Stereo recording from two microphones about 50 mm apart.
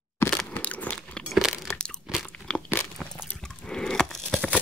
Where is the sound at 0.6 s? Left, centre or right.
Left.